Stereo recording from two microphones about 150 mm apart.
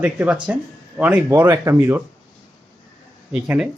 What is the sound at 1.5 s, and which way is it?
Speech, 20° right (ahead or behind).